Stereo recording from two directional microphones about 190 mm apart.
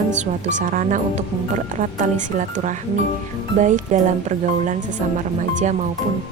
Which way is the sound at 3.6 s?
40° right (ahead or behind).